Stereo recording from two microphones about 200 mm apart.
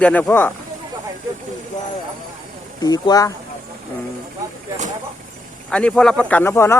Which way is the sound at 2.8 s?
20° left (ahead or behind).